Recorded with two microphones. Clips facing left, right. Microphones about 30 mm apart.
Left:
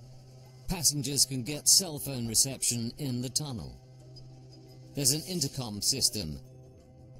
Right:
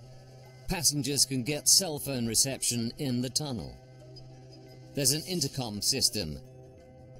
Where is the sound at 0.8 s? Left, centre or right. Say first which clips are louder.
Right 1 dB; centre.